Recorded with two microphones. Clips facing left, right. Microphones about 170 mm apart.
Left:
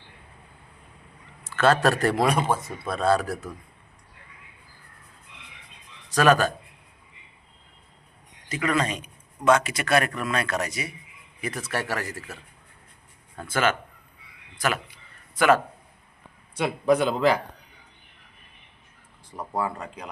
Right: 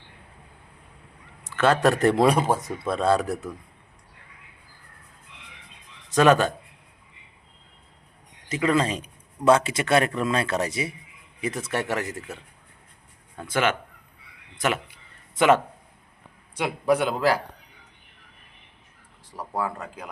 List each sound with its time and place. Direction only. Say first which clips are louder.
1.5 s speech: even; 15° right (ahead or behind); by 2.6 s 35° right (ahead or behind)
2.8 s speech: right 1 dB; 20° right (ahead or behind)
6.1 s speech: right 2 dB; 20° right (ahead or behind)
8.4 s a man's voice: right 3 dB; 25° right (ahead or behind)
15.4 s speech: right 1 dB; 20° right (ahead or behind)
16.6 s a man's voice: left 1 dB; 10° right (ahead or behind)
19.5 s speech: even; centre (ahead or behind)